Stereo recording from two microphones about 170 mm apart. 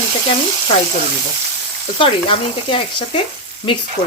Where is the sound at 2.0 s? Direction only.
30° left (ahead or behind).